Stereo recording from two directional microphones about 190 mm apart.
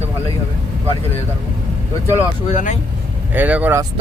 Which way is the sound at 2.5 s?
40° left (ahead or behind).